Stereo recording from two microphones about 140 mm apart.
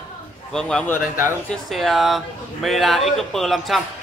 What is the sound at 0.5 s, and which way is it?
A man's voice, 5° left (ahead or behind).